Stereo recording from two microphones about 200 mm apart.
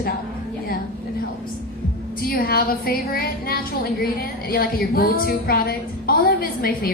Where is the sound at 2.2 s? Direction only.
50° left (ahead or behind).